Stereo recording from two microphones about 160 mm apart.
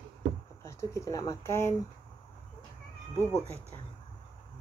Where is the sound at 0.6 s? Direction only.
20° left (ahead or behind).